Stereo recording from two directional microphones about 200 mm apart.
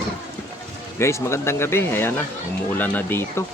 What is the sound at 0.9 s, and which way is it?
Speech, 15° left (ahead or behind).